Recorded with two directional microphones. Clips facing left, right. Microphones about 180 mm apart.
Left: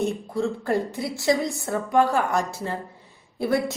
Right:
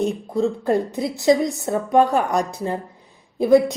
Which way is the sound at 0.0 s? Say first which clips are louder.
Right 4 dB; 20° right (ahead or behind).